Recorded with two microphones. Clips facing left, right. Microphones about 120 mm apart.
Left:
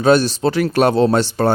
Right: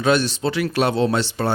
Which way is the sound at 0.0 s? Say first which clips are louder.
Left 5 dB; 40° left (ahead or behind).